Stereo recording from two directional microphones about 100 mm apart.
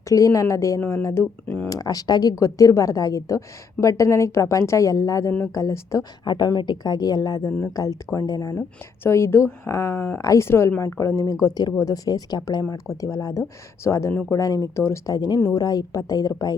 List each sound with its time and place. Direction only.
0.1 s speech: 30° left (ahead or behind); by 1.7 s 15° left (ahead or behind)
1.7 s speech: 40° left (ahead or behind)
6.2 s speech: 45° left (ahead or behind)
9.0 s speech: 25° left (ahead or behind)